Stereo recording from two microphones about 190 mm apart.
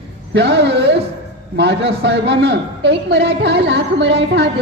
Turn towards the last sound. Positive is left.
turn(degrees=-65)  # may be behind; listen again after turning